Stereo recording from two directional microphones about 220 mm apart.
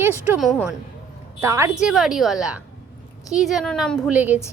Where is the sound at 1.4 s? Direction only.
10° right (ahead or behind).